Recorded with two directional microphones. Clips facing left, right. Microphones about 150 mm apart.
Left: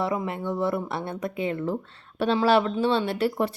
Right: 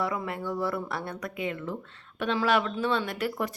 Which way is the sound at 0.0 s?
25° left (ahead or behind).